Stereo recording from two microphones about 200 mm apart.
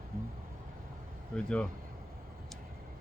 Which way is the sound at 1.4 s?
5° left (ahead or behind).